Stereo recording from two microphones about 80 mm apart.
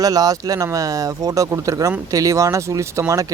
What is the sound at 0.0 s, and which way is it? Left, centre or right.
A man's voice, right.